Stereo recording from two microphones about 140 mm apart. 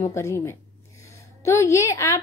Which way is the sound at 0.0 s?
20° left (ahead or behind).